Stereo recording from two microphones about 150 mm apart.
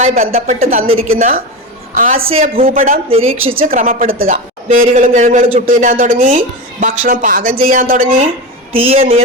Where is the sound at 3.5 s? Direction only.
70° right (ahead or behind).